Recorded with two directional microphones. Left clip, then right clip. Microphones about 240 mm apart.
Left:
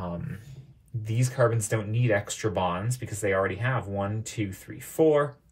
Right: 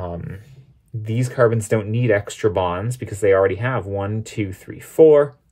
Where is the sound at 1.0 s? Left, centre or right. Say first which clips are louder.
Right 8 dB; right.